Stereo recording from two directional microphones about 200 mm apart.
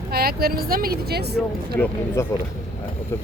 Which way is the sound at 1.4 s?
10° left (ahead or behind).